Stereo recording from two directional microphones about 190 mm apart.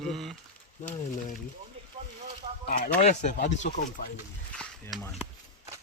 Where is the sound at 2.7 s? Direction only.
50° left (ahead or behind).